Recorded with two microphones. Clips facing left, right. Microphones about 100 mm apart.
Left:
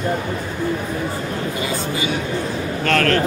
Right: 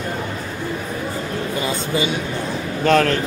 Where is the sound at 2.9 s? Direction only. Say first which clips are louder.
Right 3 dB; 15° right (ahead or behind).